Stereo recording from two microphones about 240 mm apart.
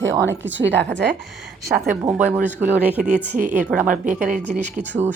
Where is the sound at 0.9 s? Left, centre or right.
Right.